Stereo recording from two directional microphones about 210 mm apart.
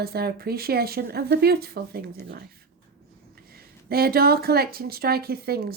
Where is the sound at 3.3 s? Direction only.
45° right (ahead or behind).